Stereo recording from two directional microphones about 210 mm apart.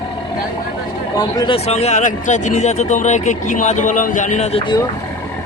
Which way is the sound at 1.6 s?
30° left (ahead or behind).